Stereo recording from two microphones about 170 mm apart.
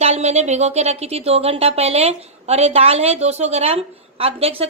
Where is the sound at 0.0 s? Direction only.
40° right (ahead or behind).